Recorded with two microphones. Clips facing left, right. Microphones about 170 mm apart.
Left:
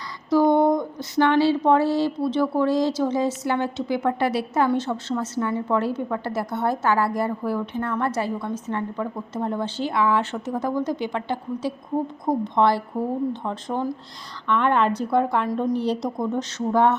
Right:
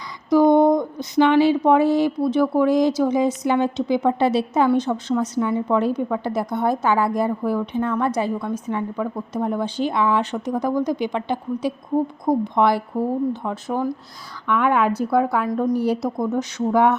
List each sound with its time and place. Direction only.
0.3 s a woman's voice: 15° right (ahead or behind)